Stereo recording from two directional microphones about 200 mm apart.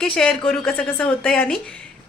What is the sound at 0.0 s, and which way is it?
A woman's voice, 5° left (ahead or behind).